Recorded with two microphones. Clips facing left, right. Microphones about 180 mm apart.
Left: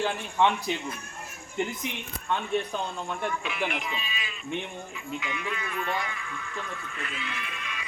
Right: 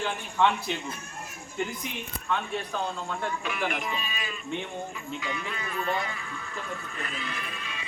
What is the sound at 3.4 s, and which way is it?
Speech, 45° right (ahead or behind).